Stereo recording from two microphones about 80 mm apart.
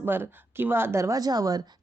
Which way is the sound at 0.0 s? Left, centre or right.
Right.